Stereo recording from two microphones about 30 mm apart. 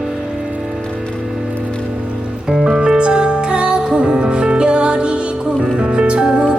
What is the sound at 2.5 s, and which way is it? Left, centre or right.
Music, right.